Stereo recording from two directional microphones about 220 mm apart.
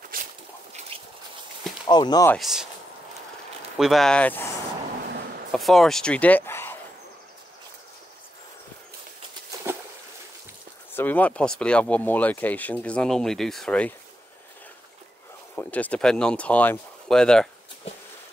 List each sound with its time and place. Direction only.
0.1 s a sound: 40° right (ahead or behind)
1.9 s speech: 20° left (ahead or behind)
2.3 s speech: centre (ahead or behind)
3.7 s speech: centre (ahead or behind)
5.5 s speech: centre (ahead or behind)
9.7 s boat: 10° right (ahead or behind)
10.9 s speech: 10° left (ahead or behind)
15.5 s speech: 5° left (ahead or behind)